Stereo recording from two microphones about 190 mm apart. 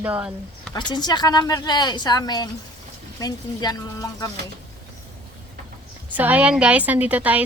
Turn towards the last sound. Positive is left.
turn(degrees=-10)  # may be behind; listen again after turning